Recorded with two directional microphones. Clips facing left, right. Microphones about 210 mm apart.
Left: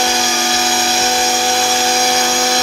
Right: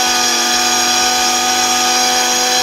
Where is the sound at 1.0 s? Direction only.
10° left (ahead or behind).